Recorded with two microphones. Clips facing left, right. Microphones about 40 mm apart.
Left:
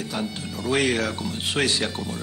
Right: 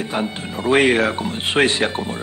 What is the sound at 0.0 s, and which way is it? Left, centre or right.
Speech, right.